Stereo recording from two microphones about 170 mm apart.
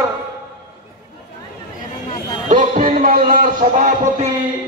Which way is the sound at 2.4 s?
50° right (ahead or behind).